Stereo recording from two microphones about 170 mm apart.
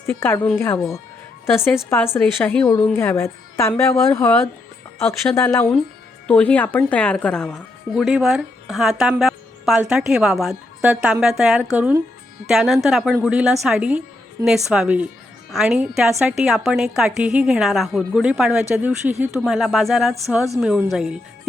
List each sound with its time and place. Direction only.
0.0 s a woman's voice: 10° left (ahead or behind)
0.8 s speech: centre (ahead or behind)
2.2 s a woman's voice: 5° left (ahead or behind)